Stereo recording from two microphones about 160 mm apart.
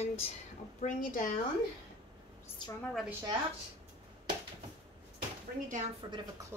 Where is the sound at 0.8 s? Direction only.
50° left (ahead or behind).